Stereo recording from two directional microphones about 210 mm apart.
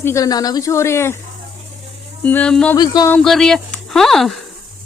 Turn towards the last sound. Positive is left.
turn(degrees=0)  # may be behind; listen again after turning